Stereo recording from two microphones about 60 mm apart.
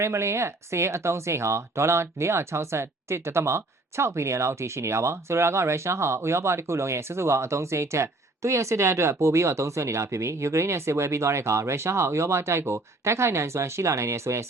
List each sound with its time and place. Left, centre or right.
0.0 s speech: right